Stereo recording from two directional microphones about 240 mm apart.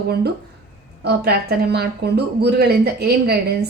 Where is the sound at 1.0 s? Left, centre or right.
Right.